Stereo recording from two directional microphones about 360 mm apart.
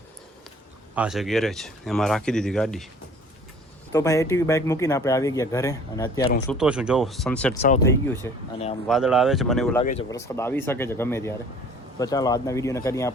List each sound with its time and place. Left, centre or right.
0.9 s speech: centre
3.9 s speech: centre
6.5 s speech: centre
7.6 s speech: centre
9.8 s speech: centre